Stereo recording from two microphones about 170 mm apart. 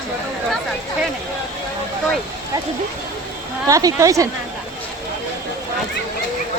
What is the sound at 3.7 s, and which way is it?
Speech, 20° right (ahead or behind).